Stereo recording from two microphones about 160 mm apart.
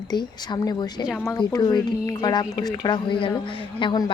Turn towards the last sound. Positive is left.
turn(degrees=30)  # may be behind; listen again after turning